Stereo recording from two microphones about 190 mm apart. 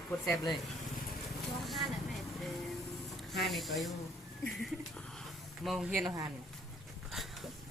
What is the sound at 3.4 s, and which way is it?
Speech, centre (ahead or behind).